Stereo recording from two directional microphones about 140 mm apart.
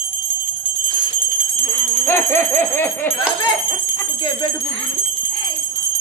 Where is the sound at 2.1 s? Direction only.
15° left (ahead or behind).